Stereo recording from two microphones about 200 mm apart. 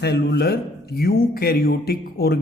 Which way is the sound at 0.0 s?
55° left (ahead or behind).